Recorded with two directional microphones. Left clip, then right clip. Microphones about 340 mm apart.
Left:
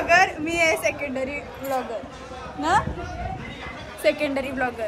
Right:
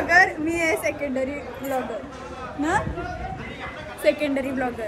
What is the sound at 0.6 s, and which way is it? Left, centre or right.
Speech, centre.